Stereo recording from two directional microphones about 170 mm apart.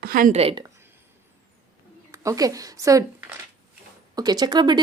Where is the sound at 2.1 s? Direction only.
20° right (ahead or behind).